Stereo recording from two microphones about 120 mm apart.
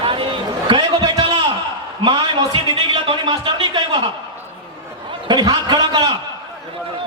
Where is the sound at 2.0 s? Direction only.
40° right (ahead or behind).